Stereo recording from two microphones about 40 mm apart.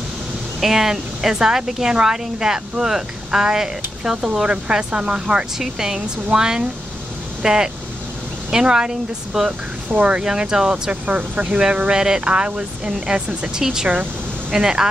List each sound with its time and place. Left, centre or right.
0.6 s a woman's voice: centre
11.1 s speech: right
11.9 s a woman's voice: centre